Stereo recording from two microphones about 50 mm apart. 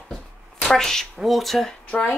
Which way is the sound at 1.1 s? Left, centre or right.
Centre.